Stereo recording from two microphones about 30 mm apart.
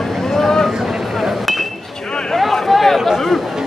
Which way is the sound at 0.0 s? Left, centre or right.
Centre.